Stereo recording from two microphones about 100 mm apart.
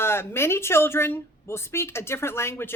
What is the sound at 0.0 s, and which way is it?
A woman's voice, 25° left (ahead or behind).